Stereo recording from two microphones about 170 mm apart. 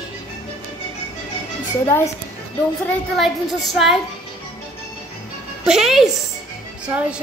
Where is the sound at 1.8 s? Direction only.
15° left (ahead or behind).